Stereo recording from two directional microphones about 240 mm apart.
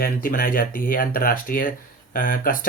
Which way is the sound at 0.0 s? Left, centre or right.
Left.